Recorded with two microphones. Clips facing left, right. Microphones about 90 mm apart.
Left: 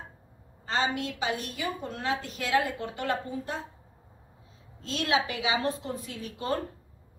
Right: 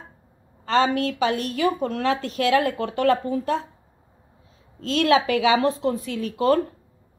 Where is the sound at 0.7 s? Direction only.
75° right (ahead or behind).